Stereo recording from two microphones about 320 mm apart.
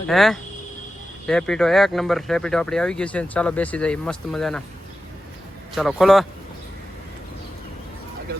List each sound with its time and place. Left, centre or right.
0.1 s speech: centre
5.7 s speech: centre